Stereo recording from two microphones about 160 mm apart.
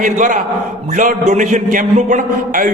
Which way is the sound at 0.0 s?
55° right (ahead or behind).